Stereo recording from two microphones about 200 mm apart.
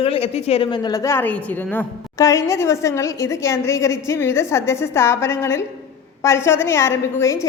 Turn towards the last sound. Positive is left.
turn(degrees=15)  # may be behind; listen again after turning